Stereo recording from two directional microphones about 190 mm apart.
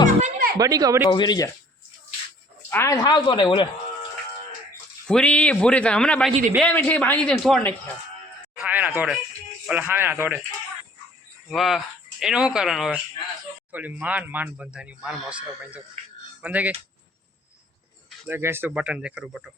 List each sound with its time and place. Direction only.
0.2 s music: 50° right (ahead or behind)
0.6 s speech: 20° right (ahead or behind)
1.0 s speech: 20° left (ahead or behind)
2.6 s speech: 10° left (ahead or behind)
5.0 s a man's voice: 5° left (ahead or behind)
8.5 s speech: 5° right (ahead or behind)
11.4 s speech: centre (ahead or behind)
18.3 s speech: 10° right (ahead or behind)